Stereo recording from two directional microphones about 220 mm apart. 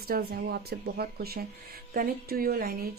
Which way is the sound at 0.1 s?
45° right (ahead or behind).